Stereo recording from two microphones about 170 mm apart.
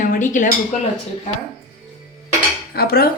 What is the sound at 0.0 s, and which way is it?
Dishes, 50° left (ahead or behind).